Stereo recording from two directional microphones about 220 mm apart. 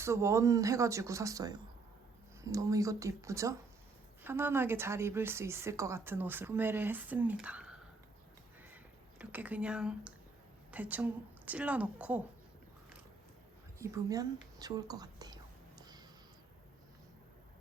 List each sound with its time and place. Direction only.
0.0 s a woman's voice: 10° right (ahead or behind)
8.6 s crow: 10° right (ahead or behind)
10.7 s a woman's voice: 5° right (ahead or behind)
13.7 s speech: 15° right (ahead or behind)